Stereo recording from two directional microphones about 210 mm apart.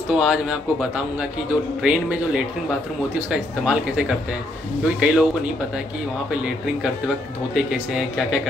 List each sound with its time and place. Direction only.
0.1 s speech: 5° right (ahead or behind)